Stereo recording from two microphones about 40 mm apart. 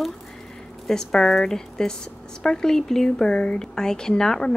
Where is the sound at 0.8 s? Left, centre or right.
Centre.